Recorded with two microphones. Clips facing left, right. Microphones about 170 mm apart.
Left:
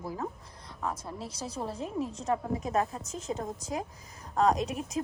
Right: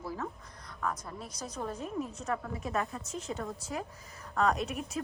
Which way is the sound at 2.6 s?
40° left (ahead or behind).